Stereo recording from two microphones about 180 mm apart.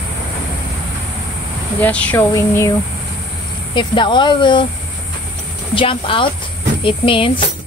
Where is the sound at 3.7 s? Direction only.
25° left (ahead or behind).